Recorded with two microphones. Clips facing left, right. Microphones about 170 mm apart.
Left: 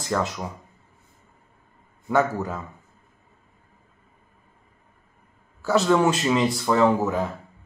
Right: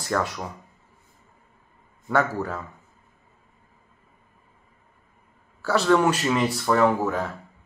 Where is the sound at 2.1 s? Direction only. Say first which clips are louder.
Left 1 dB; 15° left (ahead or behind).